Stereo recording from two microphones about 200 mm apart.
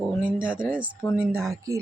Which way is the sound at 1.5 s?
15° right (ahead or behind).